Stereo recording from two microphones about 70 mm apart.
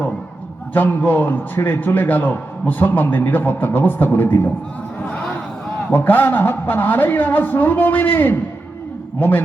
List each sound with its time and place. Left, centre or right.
0.7 s a man's voice: left
5.0 s speech: centre
5.9 s a man's voice: left